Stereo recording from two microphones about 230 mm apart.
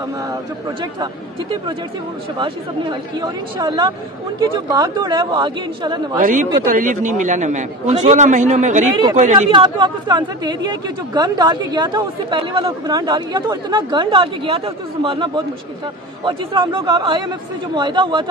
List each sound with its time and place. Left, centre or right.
2.3 s speech: right
6.1 s a man's voice: right
8.9 s speech: right